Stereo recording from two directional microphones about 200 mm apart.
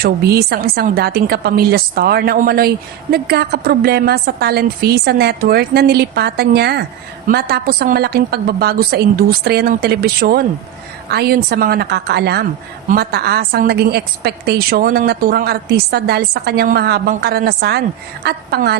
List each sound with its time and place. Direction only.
0.0 s a woman's voice: 50° right (ahead or behind)